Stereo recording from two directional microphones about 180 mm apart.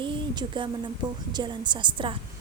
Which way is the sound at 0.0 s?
25° right (ahead or behind).